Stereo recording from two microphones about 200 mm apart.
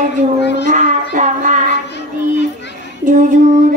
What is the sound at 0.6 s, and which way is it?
Child singing, 40° right (ahead or behind).